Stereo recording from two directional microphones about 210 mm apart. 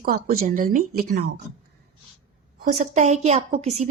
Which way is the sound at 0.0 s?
45° right (ahead or behind).